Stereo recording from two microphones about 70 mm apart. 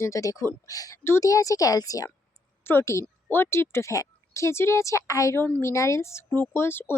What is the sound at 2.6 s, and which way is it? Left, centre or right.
A woman's voice, left.